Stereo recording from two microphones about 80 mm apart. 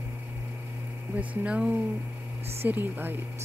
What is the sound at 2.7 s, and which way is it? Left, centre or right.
Speech, right.